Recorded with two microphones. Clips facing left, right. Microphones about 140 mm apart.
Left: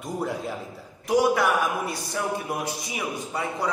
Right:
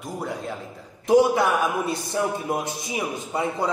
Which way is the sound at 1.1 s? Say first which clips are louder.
Right 3 dB; 25° right (ahead or behind).